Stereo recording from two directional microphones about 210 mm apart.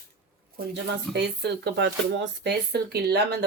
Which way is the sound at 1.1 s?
55° right (ahead or behind).